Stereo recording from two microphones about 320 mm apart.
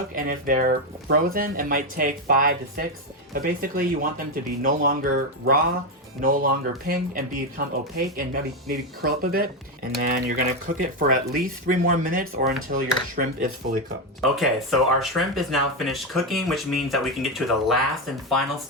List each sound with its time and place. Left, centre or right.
0.2 s speech: right
14.2 s speech: centre